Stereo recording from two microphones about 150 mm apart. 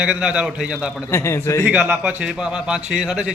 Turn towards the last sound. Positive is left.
turn(degrees=-5)  # may be behind; listen again after turning